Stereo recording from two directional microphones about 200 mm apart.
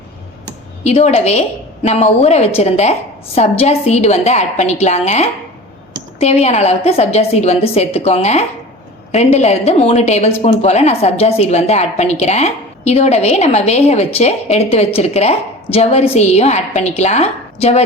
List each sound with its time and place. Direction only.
0.9 s a woman's voice: 30° left (ahead or behind)